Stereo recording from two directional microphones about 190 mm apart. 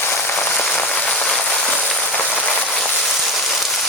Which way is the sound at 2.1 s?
5° left (ahead or behind).